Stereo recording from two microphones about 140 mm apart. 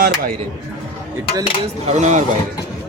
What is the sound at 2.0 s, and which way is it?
Speech, 60° right (ahead or behind).